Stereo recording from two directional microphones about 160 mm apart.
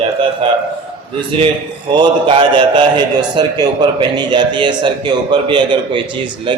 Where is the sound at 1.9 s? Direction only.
30° right (ahead or behind).